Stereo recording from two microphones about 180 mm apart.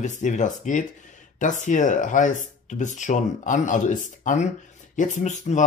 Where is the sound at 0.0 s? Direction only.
45° left (ahead or behind).